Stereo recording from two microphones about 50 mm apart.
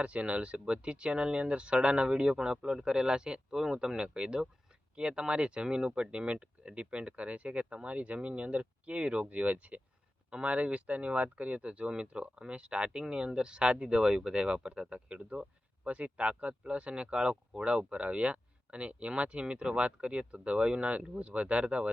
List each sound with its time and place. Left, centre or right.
0.0 s speech: right